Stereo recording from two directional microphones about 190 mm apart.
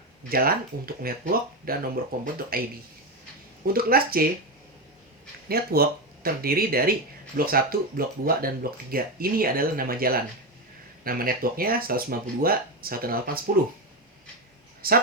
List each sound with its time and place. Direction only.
0.3 s speech: 50° right (ahead or behind)
3.7 s speech: 50° right (ahead or behind)
5.5 s speech: 50° right (ahead or behind)
14.8 s speech: 50° right (ahead or behind)